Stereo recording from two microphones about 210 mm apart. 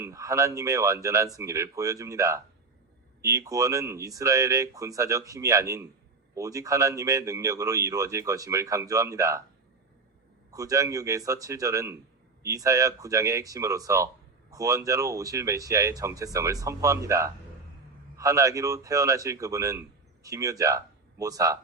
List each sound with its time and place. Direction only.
0.0 s speech: 15° right (ahead or behind)
10.5 s speech: 15° right (ahead or behind)